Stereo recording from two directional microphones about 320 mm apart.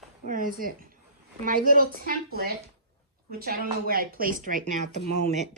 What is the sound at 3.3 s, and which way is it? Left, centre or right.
A woman's voice, right.